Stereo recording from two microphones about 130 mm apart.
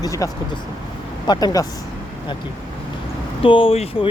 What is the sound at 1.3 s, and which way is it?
Speech, 30° left (ahead or behind).